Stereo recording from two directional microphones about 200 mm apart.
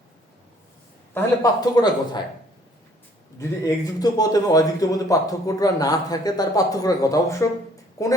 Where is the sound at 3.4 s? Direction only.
15° left (ahead or behind).